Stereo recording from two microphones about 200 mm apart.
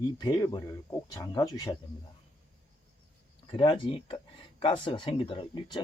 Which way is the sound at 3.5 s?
25° left (ahead or behind).